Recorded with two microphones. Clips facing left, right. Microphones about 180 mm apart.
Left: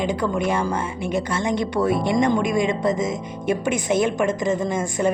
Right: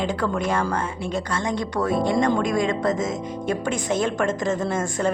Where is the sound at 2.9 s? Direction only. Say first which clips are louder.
Left 1 dB; centre (ahead or behind).